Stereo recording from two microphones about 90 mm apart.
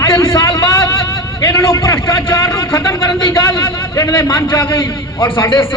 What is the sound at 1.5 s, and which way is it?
A man's voice, 30° left (ahead or behind).